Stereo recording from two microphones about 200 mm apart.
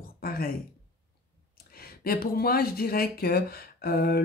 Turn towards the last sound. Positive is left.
turn(degrees=50)  # may be behind; listen again after turning